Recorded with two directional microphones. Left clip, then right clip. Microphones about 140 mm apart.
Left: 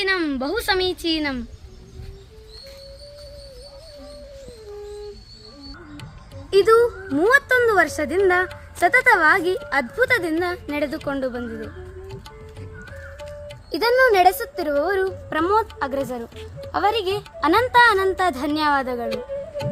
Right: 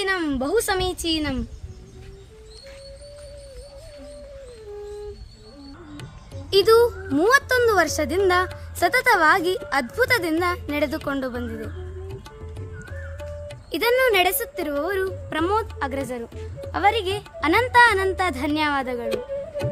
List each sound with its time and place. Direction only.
0.0 s speech: 25° right (ahead or behind)
6.5 s a woman's voice: 5° left (ahead or behind)
13.7 s a woman's voice: 20° left (ahead or behind)
16.7 s a woman's voice: 20° left (ahead or behind)
19.0 s music: centre (ahead or behind)